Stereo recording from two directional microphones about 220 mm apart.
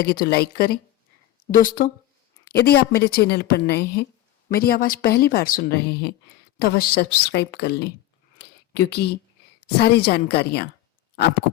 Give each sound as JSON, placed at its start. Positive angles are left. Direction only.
{"t": 0.0, "sound": "a woman's voice", "side_deg": 45}
{"t": 8.4, "sound": "a sound", "side_deg": 45}
{"t": 9.7, "sound": "speech", "side_deg": 45}